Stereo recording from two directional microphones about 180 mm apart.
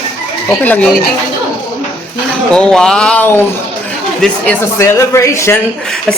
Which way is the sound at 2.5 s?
5° left (ahead or behind).